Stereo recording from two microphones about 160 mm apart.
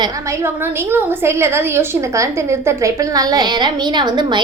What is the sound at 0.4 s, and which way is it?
A woman's voice, 15° right (ahead or behind).